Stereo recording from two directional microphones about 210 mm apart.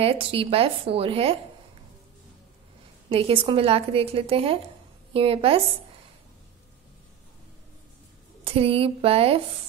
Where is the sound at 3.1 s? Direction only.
25° right (ahead or behind).